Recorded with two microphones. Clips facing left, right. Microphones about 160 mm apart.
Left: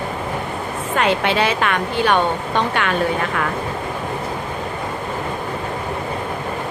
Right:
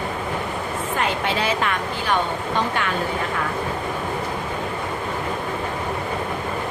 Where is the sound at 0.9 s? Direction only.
75° left (ahead or behind).